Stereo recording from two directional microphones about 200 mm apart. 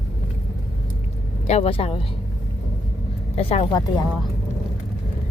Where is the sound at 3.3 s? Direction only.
30° left (ahead or behind).